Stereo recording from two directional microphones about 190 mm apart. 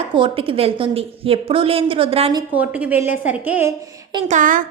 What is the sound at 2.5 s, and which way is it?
A woman's voice, 10° right (ahead or behind).